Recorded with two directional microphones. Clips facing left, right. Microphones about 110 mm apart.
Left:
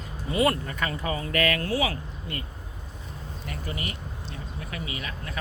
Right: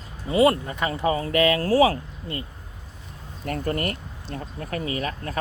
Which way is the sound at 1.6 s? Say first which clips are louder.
Right 9 dB; 40° right (ahead or behind).